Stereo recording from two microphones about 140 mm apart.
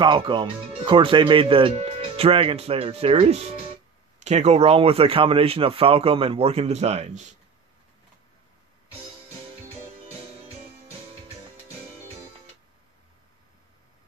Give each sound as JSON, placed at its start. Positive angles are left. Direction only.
{"t": 0.0, "sound": "speech", "side_deg": -35}